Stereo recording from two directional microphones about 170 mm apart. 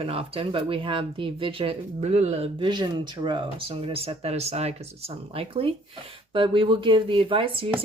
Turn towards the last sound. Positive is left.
turn(degrees=-30)  # may be behind; listen again after turning